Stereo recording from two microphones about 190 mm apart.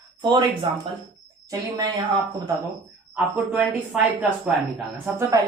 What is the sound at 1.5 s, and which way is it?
Speech, 20° right (ahead or behind).